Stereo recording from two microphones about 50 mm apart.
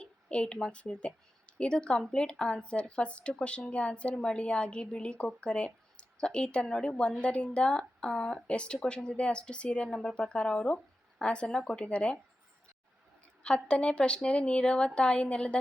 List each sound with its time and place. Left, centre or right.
0.0 s a woman's voice: left
4.1 s a woman's voice: centre
9.9 s a woman's voice: centre
13.4 s a woman's voice: centre